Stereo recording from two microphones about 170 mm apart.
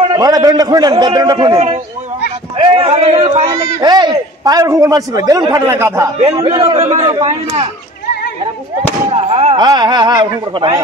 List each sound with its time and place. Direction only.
0.2 s a man's voice: 20° right (ahead or behind)
2.5 s a man's voice: 35° right (ahead or behind)
3.4 s a man's voice: 20° right (ahead or behind)
6.1 s a man's voice: 35° right (ahead or behind)
9.1 s fireworks: 35° right (ahead or behind)
9.7 s a man's voice: 25° right (ahead or behind)